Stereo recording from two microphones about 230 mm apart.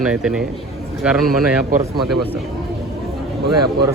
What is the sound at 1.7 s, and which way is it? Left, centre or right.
Speech, right.